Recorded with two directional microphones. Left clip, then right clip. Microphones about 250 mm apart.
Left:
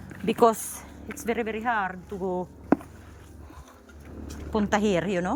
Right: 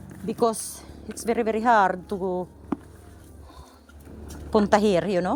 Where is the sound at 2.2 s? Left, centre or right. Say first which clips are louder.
Even; centre.